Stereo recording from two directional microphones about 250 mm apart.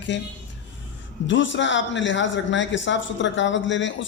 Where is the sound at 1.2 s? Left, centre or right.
Left.